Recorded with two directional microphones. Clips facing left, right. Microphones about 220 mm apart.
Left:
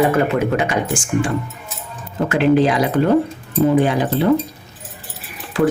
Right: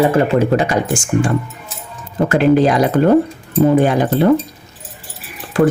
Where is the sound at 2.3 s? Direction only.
45° right (ahead or behind).